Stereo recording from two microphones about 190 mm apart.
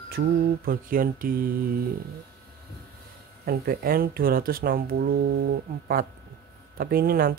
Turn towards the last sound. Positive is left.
turn(degrees=-50)  # may be behind; listen again after turning